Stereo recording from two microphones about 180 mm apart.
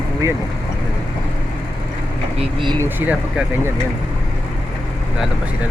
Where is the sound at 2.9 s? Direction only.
10° right (ahead or behind).